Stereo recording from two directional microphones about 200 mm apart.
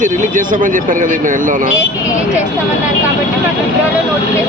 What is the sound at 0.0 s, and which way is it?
Speech, 40° right (ahead or behind).